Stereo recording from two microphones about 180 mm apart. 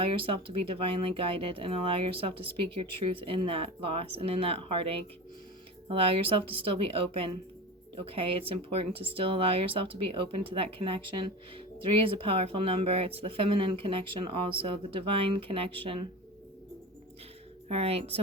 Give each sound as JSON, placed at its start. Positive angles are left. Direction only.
{"t": 0.0, "sound": "speech", "side_deg": -30}
{"t": 17.7, "sound": "speech", "side_deg": -35}